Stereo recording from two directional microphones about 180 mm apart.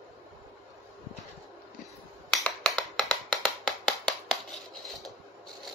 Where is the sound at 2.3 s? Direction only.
Centre (ahead or behind).